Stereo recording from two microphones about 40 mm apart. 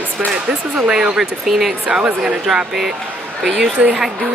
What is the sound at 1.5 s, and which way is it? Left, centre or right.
Speech, centre.